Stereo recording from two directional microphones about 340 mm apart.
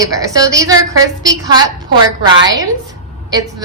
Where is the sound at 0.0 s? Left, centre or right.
Centre.